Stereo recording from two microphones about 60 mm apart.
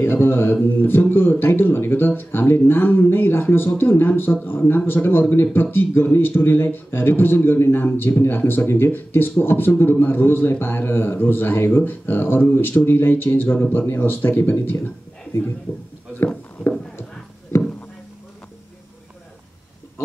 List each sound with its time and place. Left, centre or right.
0.0 s speech: left
1.4 s a sound: left
4.2 s speech: left